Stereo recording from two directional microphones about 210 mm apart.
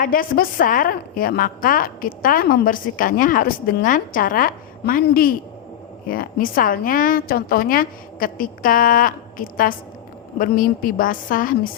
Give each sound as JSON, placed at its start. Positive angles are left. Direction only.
{"t": 0.0, "sound": "a woman's voice", "side_deg": 40}